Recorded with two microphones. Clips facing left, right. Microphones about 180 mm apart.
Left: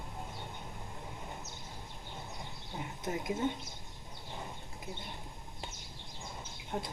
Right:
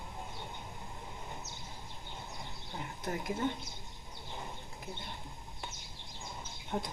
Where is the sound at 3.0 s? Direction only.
20° left (ahead or behind).